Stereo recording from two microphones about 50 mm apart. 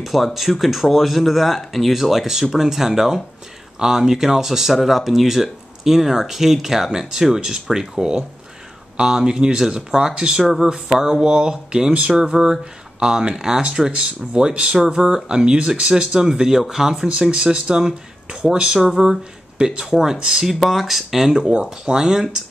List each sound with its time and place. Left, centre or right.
0.0 s speech: centre
19.0 s speech: centre
20.4 s speech: centre
21.3 s speech: centre